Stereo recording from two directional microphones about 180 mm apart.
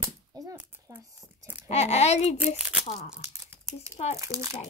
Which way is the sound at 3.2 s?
15° right (ahead or behind).